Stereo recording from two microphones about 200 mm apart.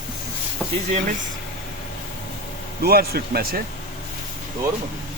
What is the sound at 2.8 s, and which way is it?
Speech, 50° right (ahead or behind).